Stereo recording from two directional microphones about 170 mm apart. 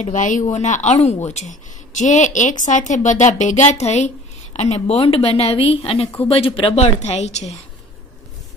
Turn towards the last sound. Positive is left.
turn(degrees=40)  # may be behind; listen again after turning